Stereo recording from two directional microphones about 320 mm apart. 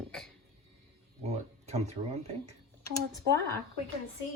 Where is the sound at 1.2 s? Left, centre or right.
Centre.